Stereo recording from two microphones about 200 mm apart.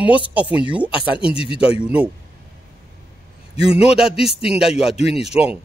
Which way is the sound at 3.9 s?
5° right (ahead or behind).